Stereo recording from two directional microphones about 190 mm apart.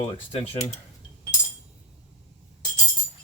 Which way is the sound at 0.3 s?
30° left (ahead or behind).